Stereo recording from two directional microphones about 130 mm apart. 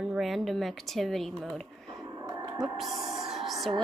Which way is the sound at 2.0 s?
25° right (ahead or behind).